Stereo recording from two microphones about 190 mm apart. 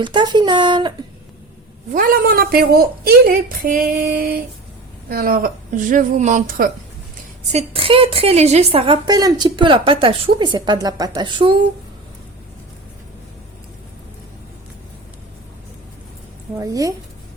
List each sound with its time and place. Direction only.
0.0 s a woman's voice: 25° right (ahead or behind)
1.9 s a woman's voice: 45° right (ahead or behind); by 11.6 s 25° right (ahead or behind)
16.6 s a woman's voice: 20° right (ahead or behind)